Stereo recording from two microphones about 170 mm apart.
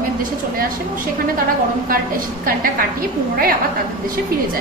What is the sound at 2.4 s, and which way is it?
A woman's voice, 60° right (ahead or behind).